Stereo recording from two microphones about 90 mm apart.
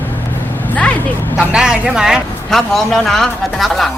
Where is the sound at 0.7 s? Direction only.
15° left (ahead or behind).